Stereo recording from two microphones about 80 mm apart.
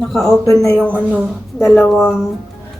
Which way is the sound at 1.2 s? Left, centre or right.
Centre.